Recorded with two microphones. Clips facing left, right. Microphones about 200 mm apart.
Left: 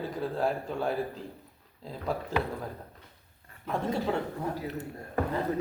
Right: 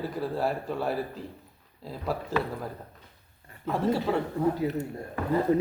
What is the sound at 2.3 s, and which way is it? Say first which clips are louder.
Speech: right 2 dB; 5° right (ahead or behind).